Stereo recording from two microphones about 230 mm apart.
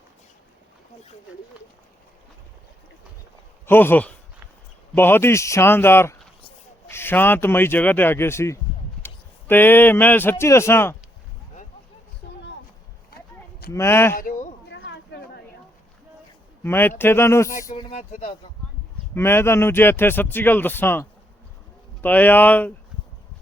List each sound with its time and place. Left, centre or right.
3.7 s speech: centre
12.2 s a sound: left
13.7 s speech: centre
14.2 s a sound: left
16.6 s speech: centre
17.5 s speech: left
19.1 s speech: centre